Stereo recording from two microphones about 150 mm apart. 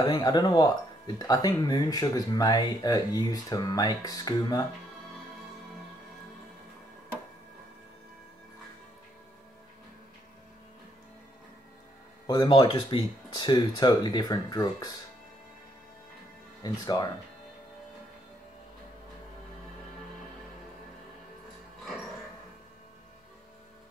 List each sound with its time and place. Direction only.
0.0 s speech: 25° left (ahead or behind)
12.3 s speech: 25° left (ahead or behind)
16.6 s speech: 25° left (ahead or behind)